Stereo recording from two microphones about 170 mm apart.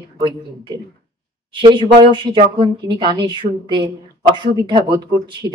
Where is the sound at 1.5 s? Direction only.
30° right (ahead or behind).